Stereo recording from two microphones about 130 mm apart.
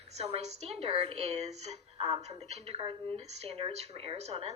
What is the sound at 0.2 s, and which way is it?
A woman's voice, 55° right (ahead or behind).